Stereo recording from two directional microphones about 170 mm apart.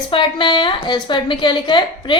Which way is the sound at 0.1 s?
30° left (ahead or behind).